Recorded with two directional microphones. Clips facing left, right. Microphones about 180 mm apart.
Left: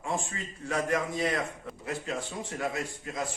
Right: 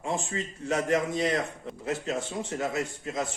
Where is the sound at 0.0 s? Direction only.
20° right (ahead or behind).